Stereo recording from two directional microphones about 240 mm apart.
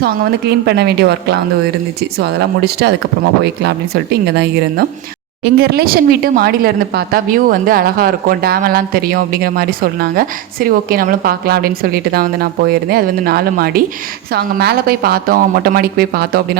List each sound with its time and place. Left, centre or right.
0.6 s speech: right